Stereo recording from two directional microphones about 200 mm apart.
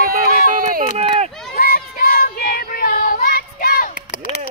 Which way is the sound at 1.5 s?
45° left (ahead or behind).